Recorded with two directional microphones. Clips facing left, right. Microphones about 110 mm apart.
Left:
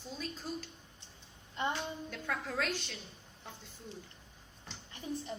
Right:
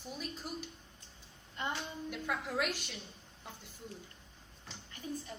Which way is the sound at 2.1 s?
15° right (ahead or behind).